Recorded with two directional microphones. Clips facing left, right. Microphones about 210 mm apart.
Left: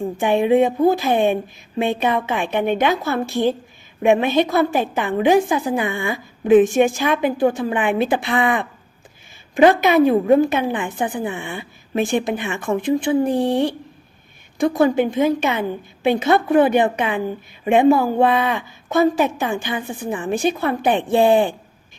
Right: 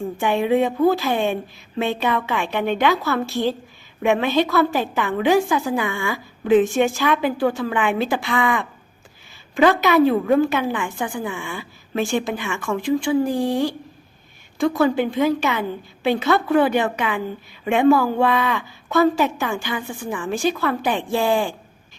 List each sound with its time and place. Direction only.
0.2 s a woman's voice: 20° left (ahead or behind)
10.2 s a woman's voice: 30° left (ahead or behind)
10.4 s a woman's voice: 20° left (ahead or behind)